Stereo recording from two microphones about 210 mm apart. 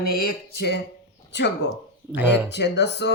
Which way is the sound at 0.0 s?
45° left (ahead or behind).